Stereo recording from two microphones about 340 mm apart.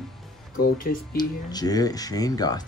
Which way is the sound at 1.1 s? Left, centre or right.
Centre.